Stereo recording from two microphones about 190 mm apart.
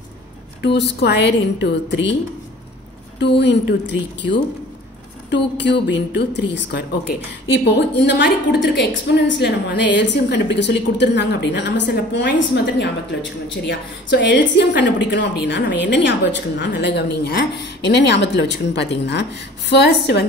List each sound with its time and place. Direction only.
0.7 s a woman's voice: 65° left (ahead or behind)
3.2 s a woman's voice: 65° left (ahead or behind)
7.6 s a woman's voice: 65° left (ahead or behind)